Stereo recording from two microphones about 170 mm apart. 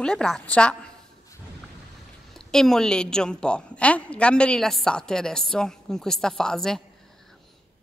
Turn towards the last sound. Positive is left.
turn(degrees=5)  # may be behind; listen again after turning